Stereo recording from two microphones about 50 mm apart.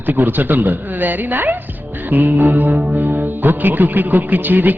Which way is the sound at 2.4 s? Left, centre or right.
Right.